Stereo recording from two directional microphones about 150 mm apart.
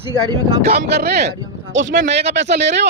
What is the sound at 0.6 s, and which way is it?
Speech, 90° right.